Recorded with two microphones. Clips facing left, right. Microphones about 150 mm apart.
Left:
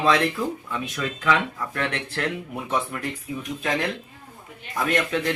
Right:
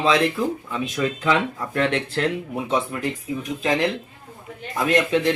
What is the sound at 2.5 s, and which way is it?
Speech, 20° right (ahead or behind).